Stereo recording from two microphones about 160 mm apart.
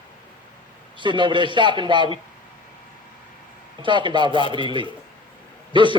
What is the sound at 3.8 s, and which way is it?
A man's voice, 30° right (ahead or behind).